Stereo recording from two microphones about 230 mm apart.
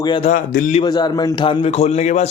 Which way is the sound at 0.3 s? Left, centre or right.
Left.